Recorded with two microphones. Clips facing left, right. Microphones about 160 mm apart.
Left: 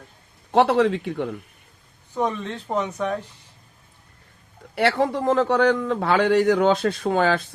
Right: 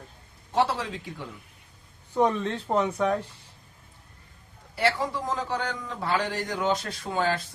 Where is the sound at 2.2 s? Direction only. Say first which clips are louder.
Right 1 dB; centre (ahead or behind).